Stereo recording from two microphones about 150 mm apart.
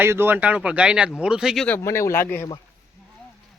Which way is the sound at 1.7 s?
15° left (ahead or behind).